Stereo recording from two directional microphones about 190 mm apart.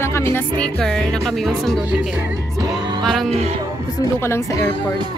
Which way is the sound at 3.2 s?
35° right (ahead or behind).